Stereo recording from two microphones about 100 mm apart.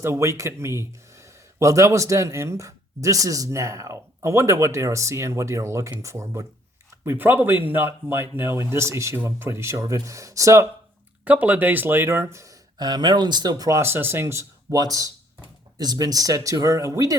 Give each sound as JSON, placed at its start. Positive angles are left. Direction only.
{"t": 0.0, "sound": "speech", "side_deg": -30}
{"t": 7.0, "sound": "speech", "side_deg": -20}
{"t": 11.3, "sound": "speech", "side_deg": -15}
{"t": 12.8, "sound": "speech", "side_deg": -45}
{"t": 14.7, "sound": "speech", "side_deg": -40}